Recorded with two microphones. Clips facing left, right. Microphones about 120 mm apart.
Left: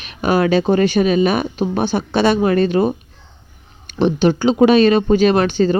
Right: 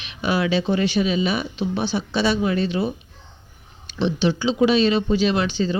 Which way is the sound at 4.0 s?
50° left (ahead or behind).